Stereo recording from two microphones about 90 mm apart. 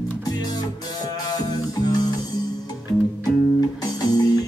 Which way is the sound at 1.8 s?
50° left (ahead or behind).